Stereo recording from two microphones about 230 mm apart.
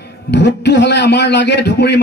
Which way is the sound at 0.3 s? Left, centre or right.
Left.